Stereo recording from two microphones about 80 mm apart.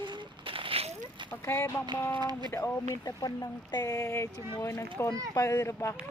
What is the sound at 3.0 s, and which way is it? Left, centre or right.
A child's voice, left.